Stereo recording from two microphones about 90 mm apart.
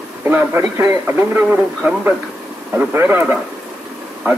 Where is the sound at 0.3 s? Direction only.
25° right (ahead or behind).